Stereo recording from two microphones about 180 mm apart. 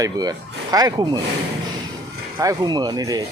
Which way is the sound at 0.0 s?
20° right (ahead or behind).